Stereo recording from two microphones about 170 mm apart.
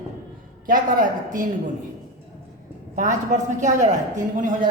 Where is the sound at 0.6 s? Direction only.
55° right (ahead or behind).